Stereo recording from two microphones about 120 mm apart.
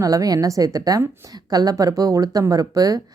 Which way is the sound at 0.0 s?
30° right (ahead or behind).